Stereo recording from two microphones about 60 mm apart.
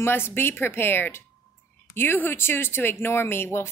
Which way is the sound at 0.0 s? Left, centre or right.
Left.